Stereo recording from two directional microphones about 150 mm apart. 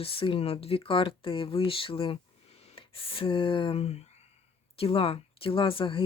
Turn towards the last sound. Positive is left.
turn(degrees=35)  # may be behind; listen again after turning